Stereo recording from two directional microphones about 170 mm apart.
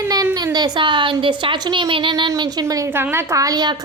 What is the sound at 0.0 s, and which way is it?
A woman's voice, 20° right (ahead or behind).